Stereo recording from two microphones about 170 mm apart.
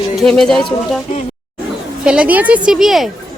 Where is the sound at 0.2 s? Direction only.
Centre (ahead or behind).